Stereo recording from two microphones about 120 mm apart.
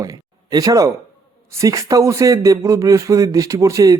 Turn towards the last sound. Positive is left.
turn(degrees=-25)  # may be behind; listen again after turning